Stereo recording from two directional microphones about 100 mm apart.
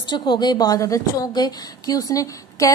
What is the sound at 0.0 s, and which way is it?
A woman's voice, 50° left (ahead or behind).